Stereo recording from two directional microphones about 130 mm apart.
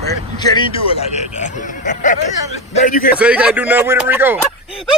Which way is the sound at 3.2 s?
10° right (ahead or behind).